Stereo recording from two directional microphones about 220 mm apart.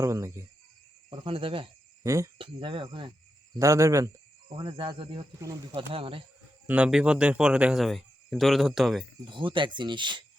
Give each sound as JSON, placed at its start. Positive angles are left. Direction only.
{"t": 0.0, "sound": "speech", "side_deg": -15}
{"t": 1.1, "sound": "speech", "side_deg": -25}
{"t": 2.0, "sound": "speech", "side_deg": -15}
{"t": 6.7, "sound": "speech", "side_deg": -5}
{"t": 9.3, "sound": "speech", "side_deg": -20}